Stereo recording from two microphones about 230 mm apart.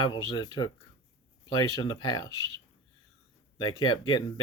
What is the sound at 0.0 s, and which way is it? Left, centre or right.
Speech, centre.